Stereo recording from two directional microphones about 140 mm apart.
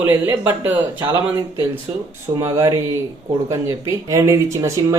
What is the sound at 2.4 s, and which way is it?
Speech, 25° right (ahead or behind).